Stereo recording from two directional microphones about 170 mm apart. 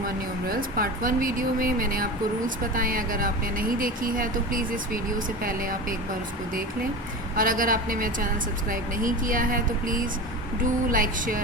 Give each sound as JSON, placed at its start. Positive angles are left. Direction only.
{"t": 0.4, "sound": "speech", "side_deg": -55}
{"t": 7.3, "sound": "speech", "side_deg": -55}